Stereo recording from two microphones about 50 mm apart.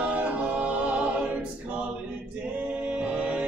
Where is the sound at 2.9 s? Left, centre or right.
Right.